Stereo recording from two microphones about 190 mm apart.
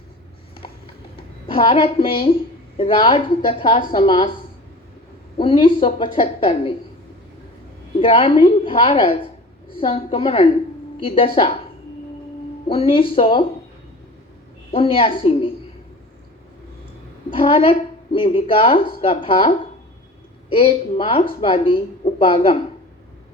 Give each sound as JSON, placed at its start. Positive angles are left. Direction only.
{"t": 0.6, "sound": "clip-clop", "side_deg": 25}
{"t": 1.5, "sound": "a woman's voice", "side_deg": 25}
{"t": 5.4, "sound": "a woman's voice", "side_deg": 25}
{"t": 8.0, "sound": "a woman's voice", "side_deg": 30}
{"t": 12.6, "sound": "a woman's voice", "side_deg": 25}
{"t": 14.7, "sound": "a woman's voice", "side_deg": 30}
{"t": 17.3, "sound": "a woman's voice", "side_deg": 30}